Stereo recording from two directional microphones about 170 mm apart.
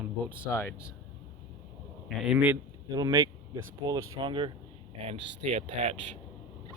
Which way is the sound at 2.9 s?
20° right (ahead or behind).